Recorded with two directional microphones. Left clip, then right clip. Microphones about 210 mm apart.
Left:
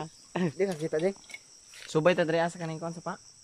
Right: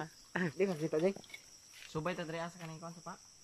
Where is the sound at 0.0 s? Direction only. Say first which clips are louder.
Left 5 dB; 15° left (ahead or behind).